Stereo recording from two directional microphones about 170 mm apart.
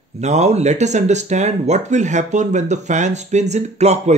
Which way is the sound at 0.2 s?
40° right (ahead or behind).